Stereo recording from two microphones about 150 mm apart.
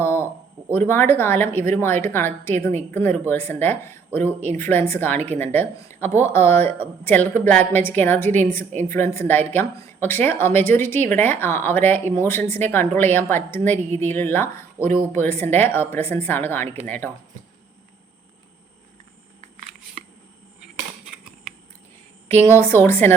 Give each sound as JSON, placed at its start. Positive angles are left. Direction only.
{"t": 0.0, "sound": "a sound", "side_deg": 15}
{"t": 0.7, "sound": "a woman's voice", "side_deg": 15}
{"t": 22.3, "sound": "a woman's voice", "side_deg": 15}